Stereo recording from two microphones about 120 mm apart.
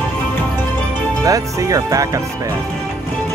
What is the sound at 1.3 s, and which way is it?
Speech, 30° right (ahead or behind).